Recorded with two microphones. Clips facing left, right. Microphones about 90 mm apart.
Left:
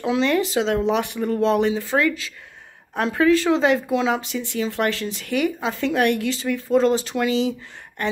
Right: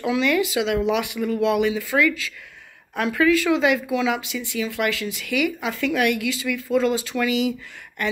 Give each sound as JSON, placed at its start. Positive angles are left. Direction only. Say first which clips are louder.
{"t": 0.0, "sound": "speech", "louder": "left 1 dB", "side_deg": 30}